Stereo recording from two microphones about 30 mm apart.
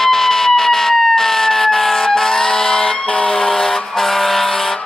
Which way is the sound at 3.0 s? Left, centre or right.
Left.